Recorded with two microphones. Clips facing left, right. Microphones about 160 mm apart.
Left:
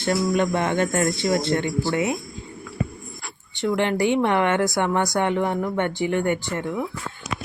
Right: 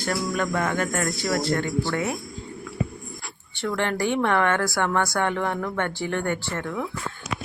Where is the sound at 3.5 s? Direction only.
20° left (ahead or behind).